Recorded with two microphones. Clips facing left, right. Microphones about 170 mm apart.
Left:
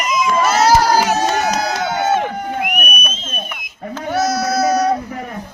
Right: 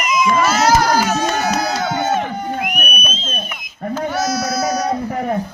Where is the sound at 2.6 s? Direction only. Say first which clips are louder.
Left 1 dB; 60° left (ahead or behind).